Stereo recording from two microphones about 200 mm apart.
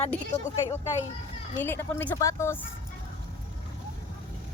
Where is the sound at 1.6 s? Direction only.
10° left (ahead or behind).